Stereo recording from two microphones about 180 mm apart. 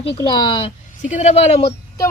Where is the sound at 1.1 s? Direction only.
40° left (ahead or behind).